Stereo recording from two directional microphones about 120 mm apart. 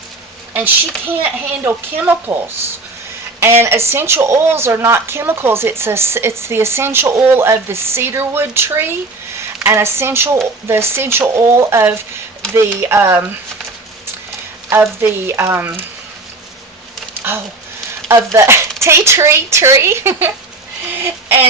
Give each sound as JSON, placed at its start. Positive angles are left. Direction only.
{"t": 0.5, "sound": "speech", "side_deg": -15}
{"t": 3.4, "sound": "speech", "side_deg": -20}
{"t": 14.7, "sound": "speech", "side_deg": -20}
{"t": 17.2, "sound": "speech", "side_deg": -20}
{"t": 20.9, "sound": "a sound", "side_deg": -15}